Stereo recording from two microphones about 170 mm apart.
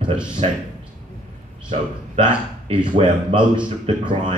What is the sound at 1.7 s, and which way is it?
Speech, 30° right (ahead or behind).